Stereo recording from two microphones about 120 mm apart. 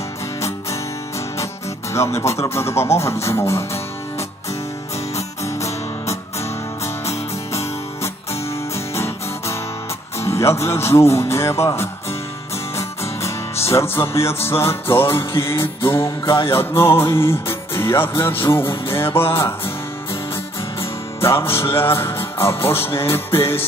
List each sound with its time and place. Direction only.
1.9 s music: 25° left (ahead or behind)
5.1 s music: 25° left (ahead or behind)
21.2 s music: 20° left (ahead or behind)